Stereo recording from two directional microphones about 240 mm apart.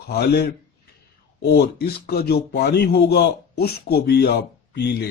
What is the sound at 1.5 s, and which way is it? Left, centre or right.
A man's voice, left.